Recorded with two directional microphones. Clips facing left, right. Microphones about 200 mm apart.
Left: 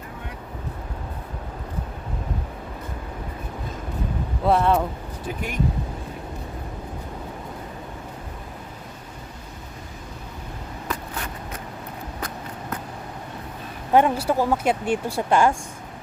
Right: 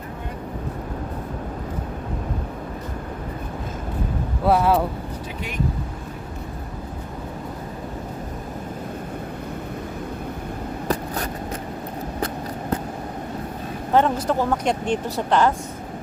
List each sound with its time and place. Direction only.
4.4 s speech: 5° right (ahead or behind)
10.8 s vehicle: 40° right (ahead or behind)
13.9 s speech: 10° left (ahead or behind)